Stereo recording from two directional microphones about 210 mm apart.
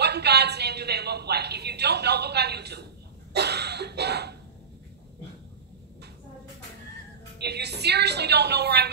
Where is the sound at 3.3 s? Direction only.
50° right (ahead or behind).